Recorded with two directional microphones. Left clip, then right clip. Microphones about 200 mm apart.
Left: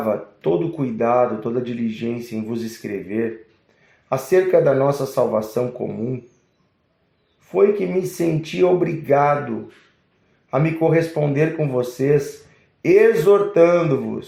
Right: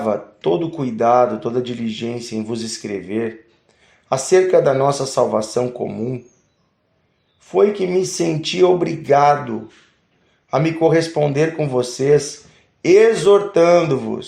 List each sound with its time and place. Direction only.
0.1 s speech: 25° right (ahead or behind)
4.1 s speech: 25° right (ahead or behind)
7.4 s speech: 25° right (ahead or behind)
10.5 s speech: 25° right (ahead or behind)